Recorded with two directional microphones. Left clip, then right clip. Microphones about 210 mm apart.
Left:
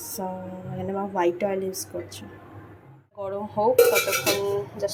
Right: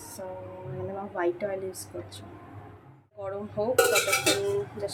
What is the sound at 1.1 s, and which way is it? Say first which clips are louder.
Speech: left 5 dB; 20° left (ahead or behind).